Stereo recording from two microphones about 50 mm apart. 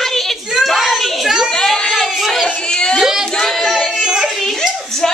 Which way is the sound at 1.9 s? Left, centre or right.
Centre.